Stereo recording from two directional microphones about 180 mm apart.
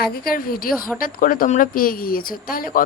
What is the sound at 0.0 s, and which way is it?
A woman's voice, 55° left (ahead or behind).